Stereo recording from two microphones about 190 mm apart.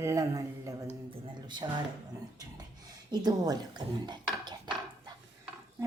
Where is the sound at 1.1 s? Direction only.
25° right (ahead or behind).